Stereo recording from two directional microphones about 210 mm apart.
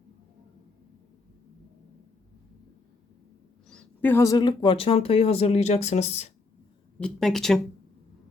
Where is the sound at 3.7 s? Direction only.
5° left (ahead or behind); by 6.3 s 30° left (ahead or behind).